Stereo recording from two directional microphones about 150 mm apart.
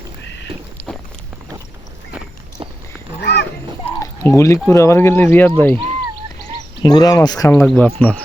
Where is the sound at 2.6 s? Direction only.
35° right (ahead or behind).